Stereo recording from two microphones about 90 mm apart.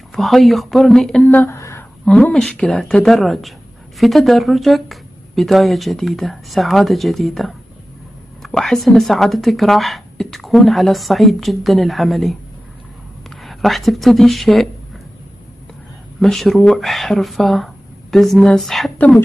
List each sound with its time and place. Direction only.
0.1 s speech: centre (ahead or behind)
1.2 s speech: 20° left (ahead or behind)
1.5 s a sound: 30° left (ahead or behind)
2.3 s speech: 5° left (ahead or behind)
13.4 s a woman's voice: centre (ahead or behind)
16.2 s speech: 5° left (ahead or behind)
18.9 s speech: 15° left (ahead or behind)